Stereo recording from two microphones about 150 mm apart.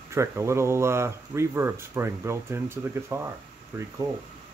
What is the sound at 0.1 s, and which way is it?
Speech, 20° right (ahead or behind).